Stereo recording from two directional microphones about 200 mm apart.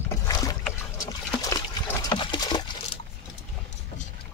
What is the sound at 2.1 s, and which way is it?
Water, 25° left (ahead or behind).